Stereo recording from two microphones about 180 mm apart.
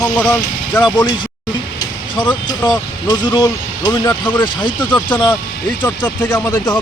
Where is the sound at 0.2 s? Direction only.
5° left (ahead or behind).